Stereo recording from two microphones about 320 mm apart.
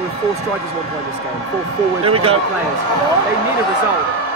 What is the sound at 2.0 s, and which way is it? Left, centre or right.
Speech, centre.